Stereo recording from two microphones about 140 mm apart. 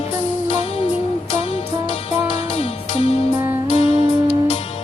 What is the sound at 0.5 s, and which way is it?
Music, 45° left (ahead or behind).